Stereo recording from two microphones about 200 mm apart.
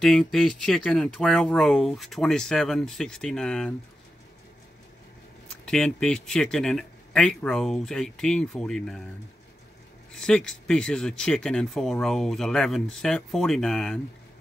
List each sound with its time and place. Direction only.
0.0 s speech: centre (ahead or behind)
5.7 s speech: 5° left (ahead or behind)
10.1 s speech: 5° left (ahead or behind)